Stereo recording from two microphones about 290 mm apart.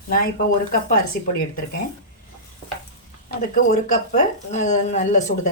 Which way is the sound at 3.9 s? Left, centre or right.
Left.